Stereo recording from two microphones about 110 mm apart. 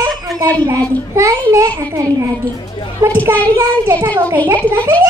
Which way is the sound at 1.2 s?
30° right (ahead or behind).